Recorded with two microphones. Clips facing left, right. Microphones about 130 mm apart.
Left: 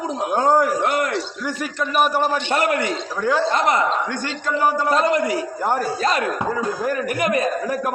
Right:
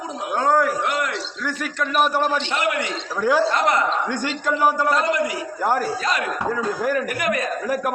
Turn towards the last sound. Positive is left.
turn(degrees=25)  # may be behind; listen again after turning